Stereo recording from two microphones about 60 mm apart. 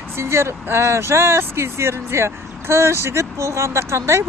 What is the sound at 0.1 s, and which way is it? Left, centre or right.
Speech, right.